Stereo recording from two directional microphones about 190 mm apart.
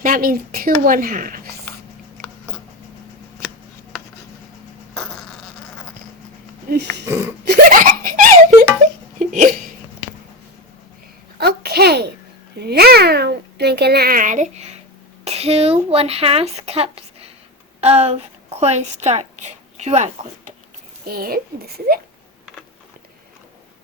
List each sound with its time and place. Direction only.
0.0 s speech: 45° right (ahead or behind)
6.7 s a child's voice: 50° right (ahead or behind)
7.0 s speech: 15° right (ahead or behind)
7.4 s giggle: 55° right (ahead or behind)
9.1 s hiccup: 40° right (ahead or behind)
11.3 s a sound: 55° right (ahead or behind)
12.5 s babbling: 55° right (ahead or behind); by 14.8 s 35° right (ahead or behind)
15.2 s a woman's voice: 35° right (ahead or behind)
21.0 s a child's voice: 50° right (ahead or behind)